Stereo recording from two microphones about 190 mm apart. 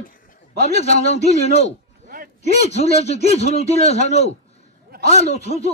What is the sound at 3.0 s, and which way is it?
A man's voice, 35° left (ahead or behind).